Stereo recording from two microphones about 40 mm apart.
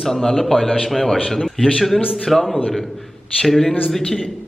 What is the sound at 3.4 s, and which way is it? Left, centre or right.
Speech, centre.